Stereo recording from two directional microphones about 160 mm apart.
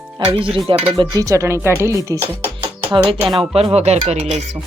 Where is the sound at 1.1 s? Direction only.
20° right (ahead or behind).